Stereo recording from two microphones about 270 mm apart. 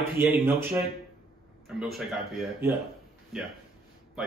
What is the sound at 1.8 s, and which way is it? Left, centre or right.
Speech, centre.